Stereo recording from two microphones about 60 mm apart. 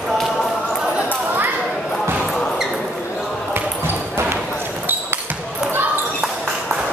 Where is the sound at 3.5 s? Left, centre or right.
Right.